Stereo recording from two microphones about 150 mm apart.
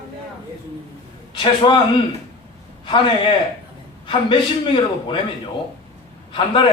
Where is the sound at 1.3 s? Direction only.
35° left (ahead or behind).